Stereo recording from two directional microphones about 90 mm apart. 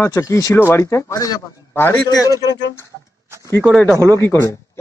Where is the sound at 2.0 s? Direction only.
45° left (ahead or behind).